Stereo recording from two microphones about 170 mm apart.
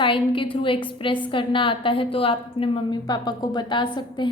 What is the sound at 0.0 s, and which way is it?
A woman's voice, 30° left (ahead or behind).